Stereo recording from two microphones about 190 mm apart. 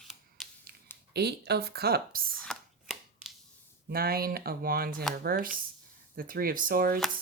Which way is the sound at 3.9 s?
50° right (ahead or behind).